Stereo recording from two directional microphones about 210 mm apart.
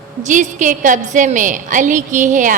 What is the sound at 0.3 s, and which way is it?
A woman's voice, 35° right (ahead or behind).